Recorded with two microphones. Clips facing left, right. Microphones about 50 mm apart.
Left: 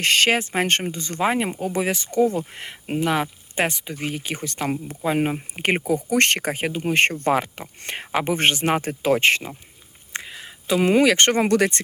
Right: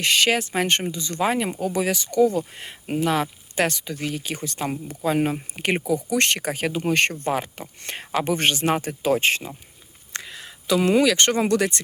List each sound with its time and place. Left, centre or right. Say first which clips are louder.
0.0 s speech: left 1 dB; left
1.5 s speech: even; left
3.5 s speech: right 1 dB; left
4.1 s speech: left 1 dB; left
10.1 s a sound: left 2 dB; centre
10.8 s speech: left 2 dB; left